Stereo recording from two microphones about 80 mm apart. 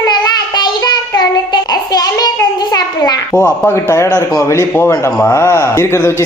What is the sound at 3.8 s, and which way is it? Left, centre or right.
A man's voice, left.